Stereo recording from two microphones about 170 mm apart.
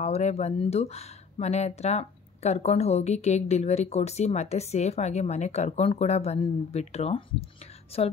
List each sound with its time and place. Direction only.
0.0 s speech: 40° left (ahead or behind)